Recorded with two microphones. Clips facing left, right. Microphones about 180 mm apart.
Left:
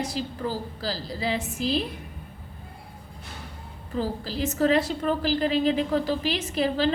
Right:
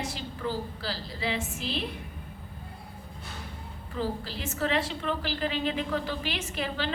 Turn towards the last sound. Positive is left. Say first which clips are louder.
# left 8 dB
turn(degrees=35)  # may be behind; listen again after turning